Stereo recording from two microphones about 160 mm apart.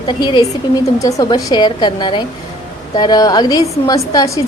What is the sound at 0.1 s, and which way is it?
A woman's voice, 30° left (ahead or behind).